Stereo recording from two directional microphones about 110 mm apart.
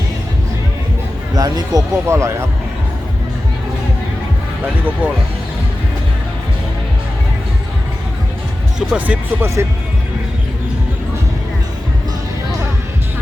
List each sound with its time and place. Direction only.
1.4 s speech: 35° right (ahead or behind)
4.6 s speech: 15° right (ahead or behind)
9.0 s speech: 20° right (ahead or behind)